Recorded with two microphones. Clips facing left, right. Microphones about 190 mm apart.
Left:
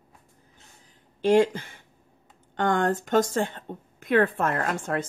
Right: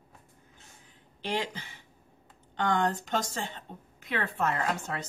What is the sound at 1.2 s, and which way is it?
Speech, 50° left (ahead or behind).